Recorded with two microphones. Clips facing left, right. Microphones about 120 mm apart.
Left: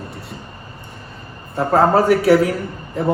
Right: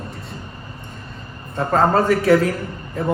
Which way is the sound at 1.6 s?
10° left (ahead or behind).